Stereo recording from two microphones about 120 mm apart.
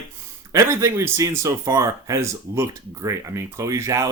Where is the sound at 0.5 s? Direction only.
25° right (ahead or behind).